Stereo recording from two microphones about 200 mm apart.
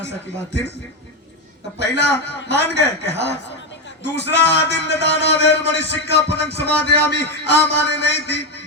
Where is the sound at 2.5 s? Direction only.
60° left (ahead or behind).